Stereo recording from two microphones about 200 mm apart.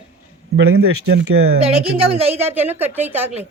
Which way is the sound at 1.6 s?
30° right (ahead or behind).